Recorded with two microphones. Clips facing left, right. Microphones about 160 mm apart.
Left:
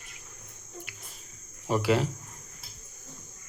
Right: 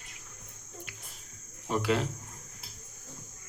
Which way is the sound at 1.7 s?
5° left (ahead or behind).